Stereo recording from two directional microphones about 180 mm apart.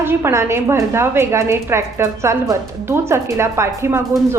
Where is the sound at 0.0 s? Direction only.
15° right (ahead or behind).